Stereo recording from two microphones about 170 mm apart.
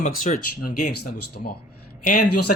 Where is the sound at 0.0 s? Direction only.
50° left (ahead or behind).